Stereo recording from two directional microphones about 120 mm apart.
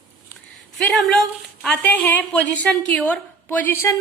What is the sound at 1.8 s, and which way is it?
A woman's voice, 15° left (ahead or behind).